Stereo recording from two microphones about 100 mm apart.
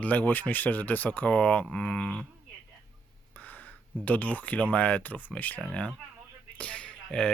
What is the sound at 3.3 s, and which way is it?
Speech, 15° left (ahead or behind).